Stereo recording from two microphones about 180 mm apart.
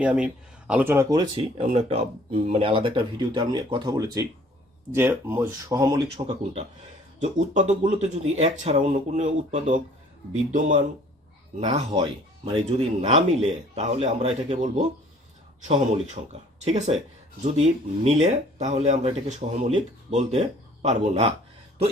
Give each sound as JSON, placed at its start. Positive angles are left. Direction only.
{"t": 0.0, "sound": "speech", "side_deg": -5}
{"t": 6.2, "sound": "speech", "side_deg": -35}
{"t": 12.5, "sound": "speech", "side_deg": -35}